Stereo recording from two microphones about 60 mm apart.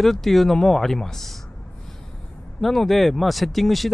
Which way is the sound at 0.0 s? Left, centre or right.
Centre.